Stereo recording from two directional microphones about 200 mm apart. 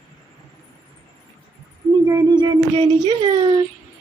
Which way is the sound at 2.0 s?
20° right (ahead or behind).